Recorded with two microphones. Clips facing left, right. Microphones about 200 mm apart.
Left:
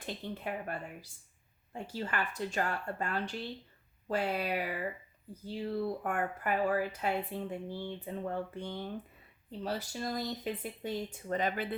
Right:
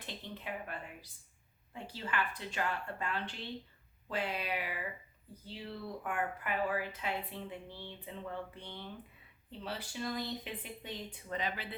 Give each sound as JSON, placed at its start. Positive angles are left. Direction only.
{"t": 0.0, "sound": "speech", "side_deg": 45}